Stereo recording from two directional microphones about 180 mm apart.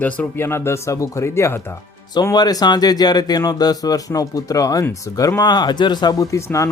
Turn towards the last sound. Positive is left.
turn(degrees=15)  # may be behind; listen again after turning